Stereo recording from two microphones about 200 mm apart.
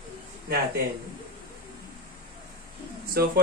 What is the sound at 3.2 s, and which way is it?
Speech, 50° right (ahead or behind).